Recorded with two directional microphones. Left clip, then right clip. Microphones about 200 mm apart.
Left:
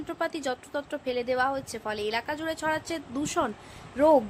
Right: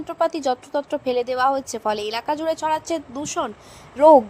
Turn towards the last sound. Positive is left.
turn(degrees=-20)  # may be behind; listen again after turning